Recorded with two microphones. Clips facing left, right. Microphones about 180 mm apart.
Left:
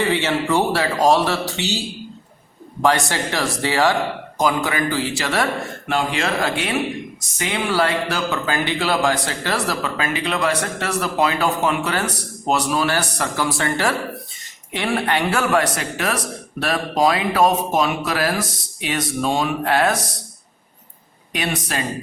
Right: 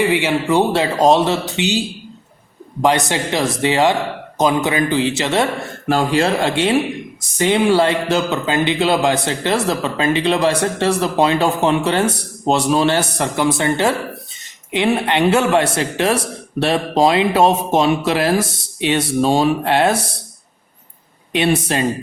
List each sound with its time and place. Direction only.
0.0 s a man's voice: 15° right (ahead or behind)
2.8 s a man's voice: 20° right (ahead or behind)
5.9 s a man's voice: 35° right (ahead or behind)
21.3 s a man's voice: 30° right (ahead or behind)